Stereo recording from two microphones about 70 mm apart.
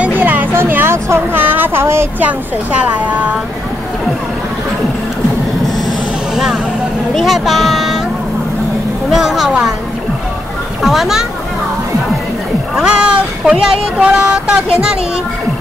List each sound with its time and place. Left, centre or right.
0.0 s a sound: right
2.2 s a woman's voice: right
6.3 s speech: centre
9.1 s speech: centre
10.8 s speech: centre
12.7 s speech: centre